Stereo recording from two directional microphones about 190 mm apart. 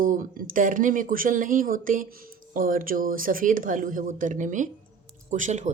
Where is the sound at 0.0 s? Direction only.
45° right (ahead or behind).